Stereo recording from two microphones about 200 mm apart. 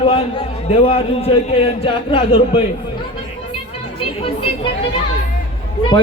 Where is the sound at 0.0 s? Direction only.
25° left (ahead or behind).